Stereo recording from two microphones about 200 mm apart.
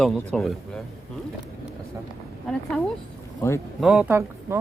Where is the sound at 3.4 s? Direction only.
15° left (ahead or behind).